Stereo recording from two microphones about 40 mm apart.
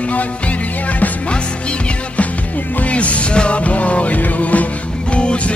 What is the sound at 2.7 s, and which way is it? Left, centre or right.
Music, left.